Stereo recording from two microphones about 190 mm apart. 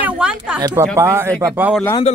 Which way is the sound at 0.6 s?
20° right (ahead or behind).